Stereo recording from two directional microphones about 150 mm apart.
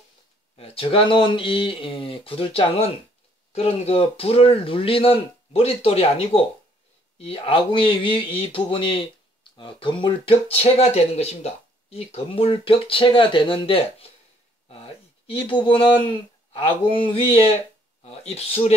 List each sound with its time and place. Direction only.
0.6 s speech: 40° left (ahead or behind)